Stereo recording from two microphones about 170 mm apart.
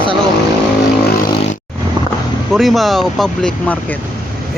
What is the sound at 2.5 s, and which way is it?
Speech, centre (ahead or behind).